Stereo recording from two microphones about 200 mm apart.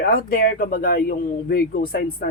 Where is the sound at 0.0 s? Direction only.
50° left (ahead or behind).